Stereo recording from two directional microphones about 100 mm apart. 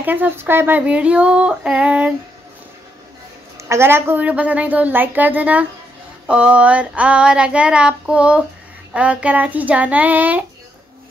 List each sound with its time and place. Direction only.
0.0 s female singing: 20° right (ahead or behind)
3.5 s female singing: 25° right (ahead or behind)